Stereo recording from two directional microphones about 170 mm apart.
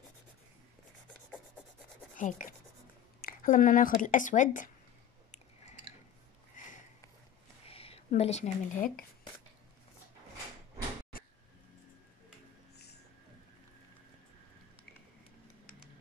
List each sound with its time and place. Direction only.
2.1 s speech: 50° left (ahead or behind)
6.6 s sniff: 50° left (ahead or behind)
7.6 s speech: 35° left (ahead or behind); by 9.0 s 50° left (ahead or behind)